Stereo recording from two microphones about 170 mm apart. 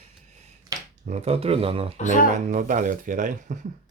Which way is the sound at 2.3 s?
45° right (ahead or behind).